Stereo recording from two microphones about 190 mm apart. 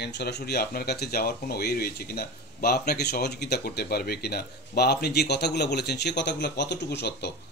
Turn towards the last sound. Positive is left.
turn(degrees=60)  # may be behind; listen again after turning